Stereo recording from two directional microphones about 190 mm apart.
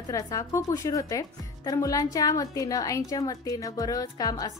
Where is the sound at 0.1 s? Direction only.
15° left (ahead or behind).